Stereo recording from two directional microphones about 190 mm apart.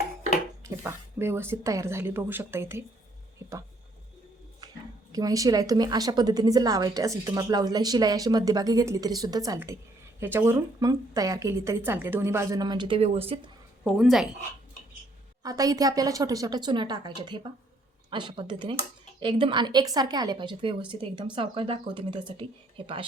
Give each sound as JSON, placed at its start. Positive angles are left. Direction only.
{"t": 0.6, "sound": "speech", "side_deg": -15}
{"t": 5.1, "sound": "a woman's voice", "side_deg": -20}
{"t": 13.8, "sound": "a woman's voice", "side_deg": 0}
{"t": 15.4, "sound": "a woman's voice", "side_deg": -20}